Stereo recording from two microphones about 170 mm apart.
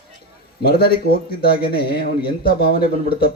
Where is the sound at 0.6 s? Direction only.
65° left (ahead or behind).